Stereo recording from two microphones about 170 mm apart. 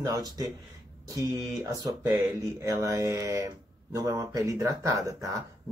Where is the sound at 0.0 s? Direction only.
20° right (ahead or behind).